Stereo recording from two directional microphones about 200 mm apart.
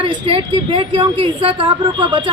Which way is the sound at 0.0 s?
25° right (ahead or behind).